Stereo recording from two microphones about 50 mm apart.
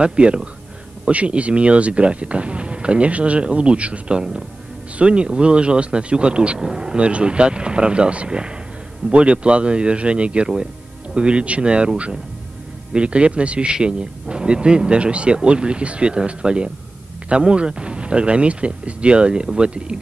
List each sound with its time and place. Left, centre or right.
0.0 s speech: right
4.2 s speech: centre
12.9 s speech: right